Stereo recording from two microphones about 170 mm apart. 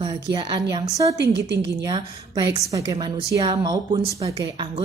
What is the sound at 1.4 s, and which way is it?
Speech, 90° right.